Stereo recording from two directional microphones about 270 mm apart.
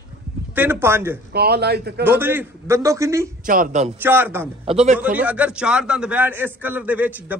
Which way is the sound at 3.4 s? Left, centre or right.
Right.